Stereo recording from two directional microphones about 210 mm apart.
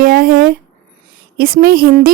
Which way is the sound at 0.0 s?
45° right (ahead or behind).